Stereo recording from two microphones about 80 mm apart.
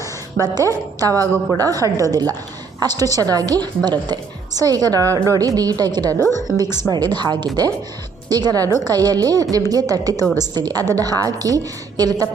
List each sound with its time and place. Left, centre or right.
0.0 s a woman's voice: right
6.9 s a woman's voice: right